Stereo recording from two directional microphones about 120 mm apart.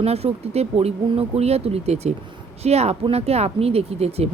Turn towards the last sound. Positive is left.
turn(degrees=-60)  # may be behind; listen again after turning